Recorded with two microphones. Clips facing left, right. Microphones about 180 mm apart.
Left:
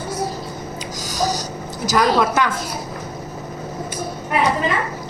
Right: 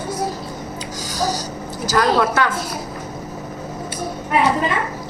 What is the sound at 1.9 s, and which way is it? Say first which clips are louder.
Speech: even; 15° left (ahead or behind).